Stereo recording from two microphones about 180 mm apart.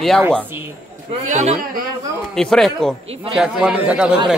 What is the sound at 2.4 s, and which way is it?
Speech, centre (ahead or behind).